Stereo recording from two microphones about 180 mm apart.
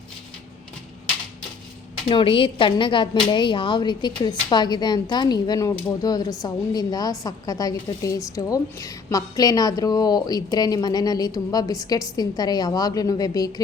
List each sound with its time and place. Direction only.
2.0 s a woman's voice: 30° left (ahead or behind)